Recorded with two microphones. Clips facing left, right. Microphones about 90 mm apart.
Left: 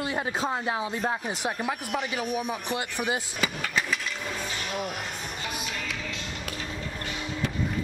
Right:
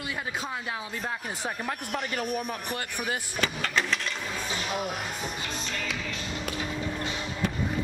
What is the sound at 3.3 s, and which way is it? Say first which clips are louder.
Vehicle: right 1 dB; 10° left (ahead or behind).